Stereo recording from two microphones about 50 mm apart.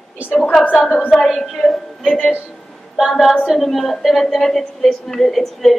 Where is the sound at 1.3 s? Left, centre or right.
Centre.